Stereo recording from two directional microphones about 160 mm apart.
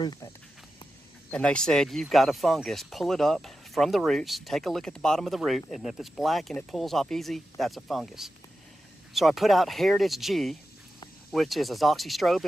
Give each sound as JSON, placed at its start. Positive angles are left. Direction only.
{"t": 0.0, "sound": "speech", "side_deg": 25}
{"t": 1.3, "sound": "speech", "side_deg": 5}